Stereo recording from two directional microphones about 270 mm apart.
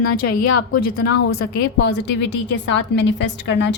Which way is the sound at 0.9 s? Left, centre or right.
Left.